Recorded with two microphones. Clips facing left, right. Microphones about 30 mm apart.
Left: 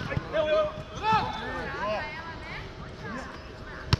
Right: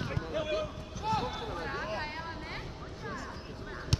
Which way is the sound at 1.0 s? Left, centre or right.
Left.